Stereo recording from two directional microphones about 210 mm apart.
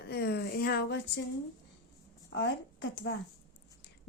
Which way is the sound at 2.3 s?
55° left (ahead or behind).